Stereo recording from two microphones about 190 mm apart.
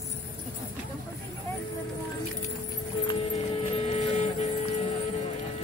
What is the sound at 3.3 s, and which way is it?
Vehicle, 30° left (ahead or behind).